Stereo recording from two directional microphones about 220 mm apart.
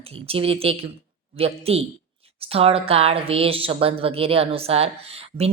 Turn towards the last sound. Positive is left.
turn(degrees=-25)  # may be behind; listen again after turning